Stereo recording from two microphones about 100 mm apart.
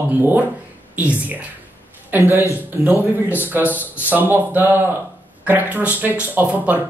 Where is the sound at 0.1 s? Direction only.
20° right (ahead or behind).